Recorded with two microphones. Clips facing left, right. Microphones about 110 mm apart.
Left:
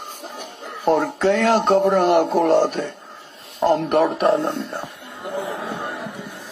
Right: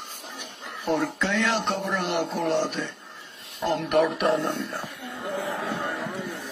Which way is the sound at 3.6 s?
35° left (ahead or behind).